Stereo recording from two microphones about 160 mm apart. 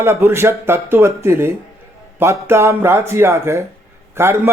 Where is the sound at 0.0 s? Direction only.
15° right (ahead or behind).